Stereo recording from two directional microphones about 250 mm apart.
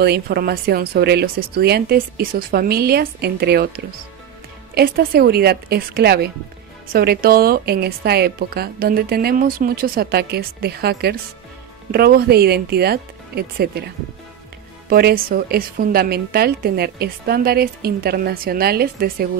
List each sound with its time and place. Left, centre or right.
0.0 s a woman's voice: right
4.7 s a woman's voice: right
14.9 s a woman's voice: right